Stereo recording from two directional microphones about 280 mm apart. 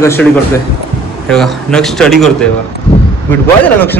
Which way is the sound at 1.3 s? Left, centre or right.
Centre.